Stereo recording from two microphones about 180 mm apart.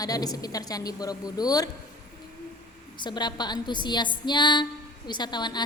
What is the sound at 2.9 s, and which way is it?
A woman's voice, 25° left (ahead or behind).